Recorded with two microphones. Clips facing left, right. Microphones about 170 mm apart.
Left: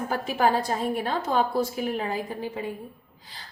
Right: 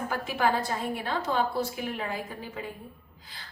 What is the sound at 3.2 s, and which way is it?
Music, 35° left (ahead or behind).